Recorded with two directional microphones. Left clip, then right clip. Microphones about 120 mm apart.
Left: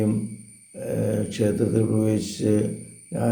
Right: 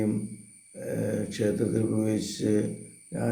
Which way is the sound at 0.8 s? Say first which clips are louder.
Left 5 dB; 25° left (ahead or behind).